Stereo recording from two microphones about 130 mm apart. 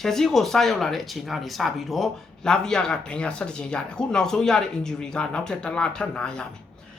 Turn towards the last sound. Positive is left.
turn(degrees=5)  # may be behind; listen again after turning